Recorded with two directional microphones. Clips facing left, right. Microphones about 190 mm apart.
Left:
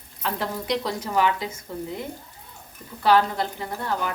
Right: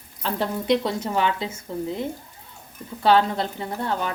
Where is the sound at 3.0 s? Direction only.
25° right (ahead or behind).